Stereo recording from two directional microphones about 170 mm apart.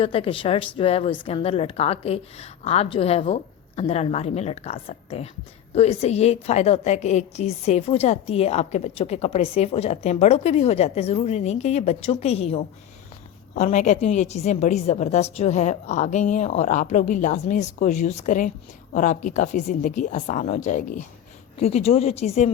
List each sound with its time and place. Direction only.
0.0 s a woman's voice: 35° left (ahead or behind); by 21.0 s 50° left (ahead or behind)
21.6 s a woman's voice: 40° left (ahead or behind)